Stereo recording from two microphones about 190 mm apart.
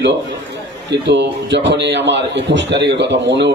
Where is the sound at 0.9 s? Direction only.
65° right (ahead or behind).